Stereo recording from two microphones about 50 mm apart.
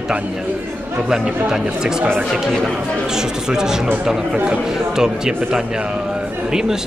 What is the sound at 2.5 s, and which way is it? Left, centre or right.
Speech, centre.